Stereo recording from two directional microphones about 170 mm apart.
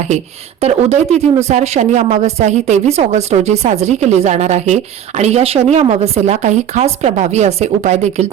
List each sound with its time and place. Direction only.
0.6 s speech: 40° right (ahead or behind)